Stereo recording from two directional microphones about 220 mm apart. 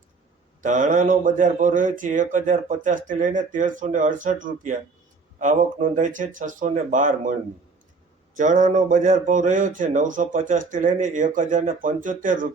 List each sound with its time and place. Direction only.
0.6 s speech: 35° right (ahead or behind)
8.4 s speech: 35° right (ahead or behind)